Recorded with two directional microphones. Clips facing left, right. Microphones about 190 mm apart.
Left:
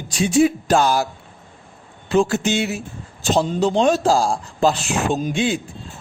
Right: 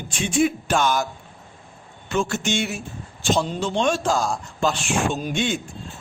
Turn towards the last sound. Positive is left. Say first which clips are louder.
# left 4 dB
turn(degrees=35)  # may be behind; listen again after turning